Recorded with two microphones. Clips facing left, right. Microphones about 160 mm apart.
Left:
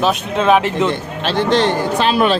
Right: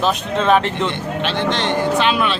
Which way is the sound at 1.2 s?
40° left (ahead or behind).